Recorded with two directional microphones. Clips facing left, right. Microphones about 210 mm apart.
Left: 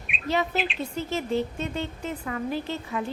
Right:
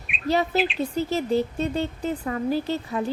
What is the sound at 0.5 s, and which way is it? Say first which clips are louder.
Speech: right 5 dB; centre (ahead or behind).